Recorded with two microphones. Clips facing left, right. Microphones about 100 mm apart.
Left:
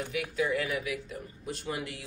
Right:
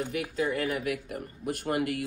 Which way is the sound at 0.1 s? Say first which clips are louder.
Right 1 dB; 40° right (ahead or behind).